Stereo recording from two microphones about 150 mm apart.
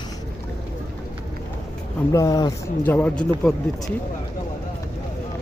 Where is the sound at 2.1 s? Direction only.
25° left (ahead or behind).